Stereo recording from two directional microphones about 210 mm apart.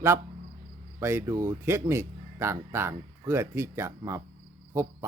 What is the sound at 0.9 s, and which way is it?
Speech, 10° right (ahead or behind).